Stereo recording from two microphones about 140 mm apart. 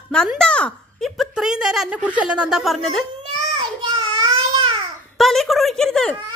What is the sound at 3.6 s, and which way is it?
Child singing, 35° right (ahead or behind).